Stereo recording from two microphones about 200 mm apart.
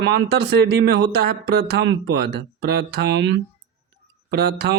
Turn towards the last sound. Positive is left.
turn(degrees=-55)  # may be behind; listen again after turning